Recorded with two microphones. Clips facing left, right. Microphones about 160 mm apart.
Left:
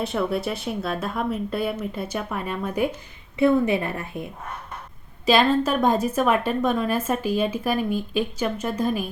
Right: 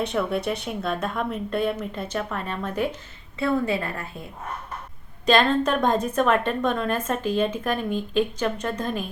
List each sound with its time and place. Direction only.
0.0 s a woman's voice: centre (ahead or behind); by 4.1 s 20° left (ahead or behind)
5.2 s a woman's voice: 5° left (ahead or behind)